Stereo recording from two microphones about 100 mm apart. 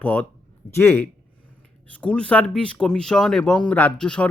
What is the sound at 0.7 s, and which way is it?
Speech, 25° left (ahead or behind).